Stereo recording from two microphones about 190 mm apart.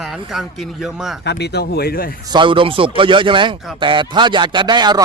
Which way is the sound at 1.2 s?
60° left (ahead or behind).